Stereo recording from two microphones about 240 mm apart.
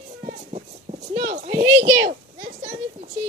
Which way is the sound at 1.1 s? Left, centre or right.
Right.